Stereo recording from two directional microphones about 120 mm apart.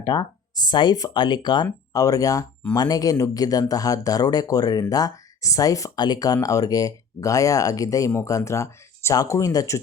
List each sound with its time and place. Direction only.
0.0 s speech: 35° left (ahead or behind)